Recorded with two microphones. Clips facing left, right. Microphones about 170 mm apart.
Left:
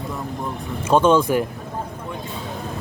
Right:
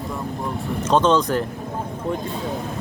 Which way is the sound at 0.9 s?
10° left (ahead or behind).